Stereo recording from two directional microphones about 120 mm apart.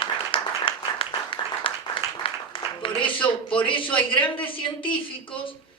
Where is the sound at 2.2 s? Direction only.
50° left (ahead or behind).